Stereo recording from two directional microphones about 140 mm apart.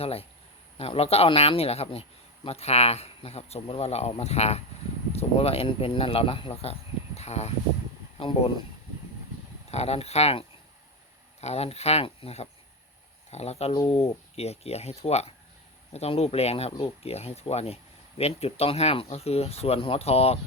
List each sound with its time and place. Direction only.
0.0 s a man's voice: 45° left (ahead or behind)
9.7 s a man's voice: 50° left (ahead or behind)